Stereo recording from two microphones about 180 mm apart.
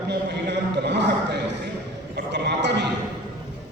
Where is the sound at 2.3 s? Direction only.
75° right (ahead or behind).